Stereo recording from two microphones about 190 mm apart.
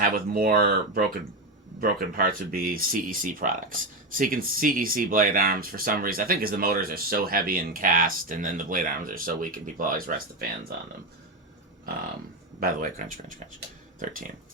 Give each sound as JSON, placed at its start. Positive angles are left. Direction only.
{"t": 0.0, "sound": "speech", "side_deg": -50}
{"t": 12.5, "sound": "speech", "side_deg": -45}